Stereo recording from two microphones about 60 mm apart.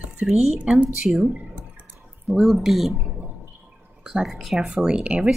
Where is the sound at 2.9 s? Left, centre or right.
Right.